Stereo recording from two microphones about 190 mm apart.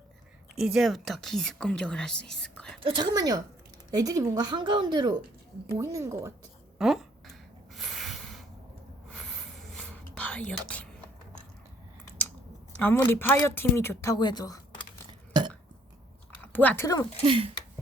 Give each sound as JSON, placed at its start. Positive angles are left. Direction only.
{"t": 0.5, "sound": "a woman's voice", "side_deg": 0}
{"t": 2.8, "sound": "speech", "side_deg": -25}
{"t": 6.7, "sound": "a sound", "side_deg": 0}
{"t": 9.7, "sound": "whispering", "side_deg": 5}
{"t": 10.7, "sound": "speech", "side_deg": 5}
{"t": 12.8, "sound": "speech", "side_deg": 10}
{"t": 15.3, "sound": "burping", "side_deg": -25}
{"t": 16.4, "sound": "speech", "side_deg": 10}
{"t": 17.2, "sound": "speech", "side_deg": -25}